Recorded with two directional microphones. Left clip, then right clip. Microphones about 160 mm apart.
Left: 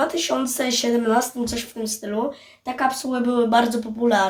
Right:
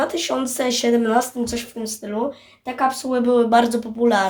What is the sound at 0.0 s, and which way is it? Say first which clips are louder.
Speech: even; 40° right (ahead or behind).